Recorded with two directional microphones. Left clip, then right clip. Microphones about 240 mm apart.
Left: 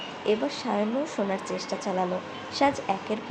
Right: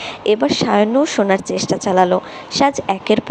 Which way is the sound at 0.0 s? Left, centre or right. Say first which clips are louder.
Right 11 dB; right.